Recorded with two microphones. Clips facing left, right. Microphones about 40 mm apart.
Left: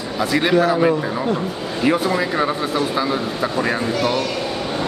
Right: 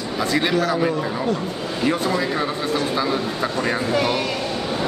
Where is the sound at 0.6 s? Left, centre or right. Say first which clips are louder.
Left 4 dB; centre.